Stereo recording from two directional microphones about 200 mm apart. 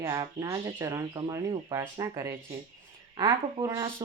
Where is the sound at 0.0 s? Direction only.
15° right (ahead or behind).